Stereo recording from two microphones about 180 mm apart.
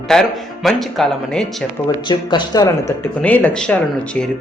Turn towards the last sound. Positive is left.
turn(degrees=5)  # may be behind; listen again after turning